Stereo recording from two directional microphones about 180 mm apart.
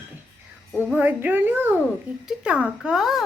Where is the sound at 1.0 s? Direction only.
10° right (ahead or behind).